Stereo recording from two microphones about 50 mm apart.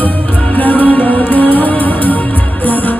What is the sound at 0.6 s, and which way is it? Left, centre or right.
Music, left.